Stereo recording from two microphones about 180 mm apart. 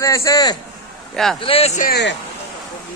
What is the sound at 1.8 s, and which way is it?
Speech, 60° left (ahead or behind).